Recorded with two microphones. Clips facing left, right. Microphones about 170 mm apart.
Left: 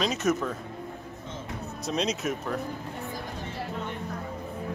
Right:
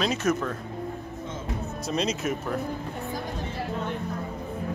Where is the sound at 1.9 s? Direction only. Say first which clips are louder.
Right 1 dB; centre (ahead or behind).